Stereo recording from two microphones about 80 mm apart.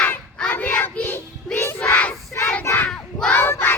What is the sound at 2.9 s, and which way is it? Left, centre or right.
Child singing, centre.